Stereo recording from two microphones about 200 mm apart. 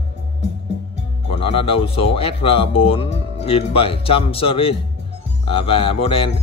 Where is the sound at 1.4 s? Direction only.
30° left (ahead or behind).